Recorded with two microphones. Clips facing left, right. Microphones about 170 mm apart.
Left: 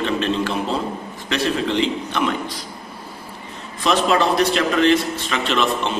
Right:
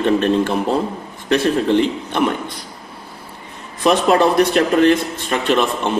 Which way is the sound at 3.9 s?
50° right (ahead or behind).